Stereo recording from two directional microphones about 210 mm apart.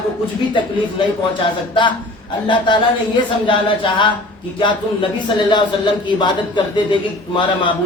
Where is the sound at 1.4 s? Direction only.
25° left (ahead or behind).